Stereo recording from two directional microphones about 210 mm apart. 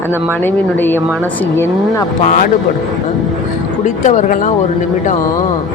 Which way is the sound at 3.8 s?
35° left (ahead or behind).